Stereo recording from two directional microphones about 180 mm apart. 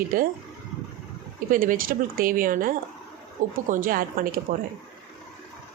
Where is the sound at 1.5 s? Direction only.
50° right (ahead or behind).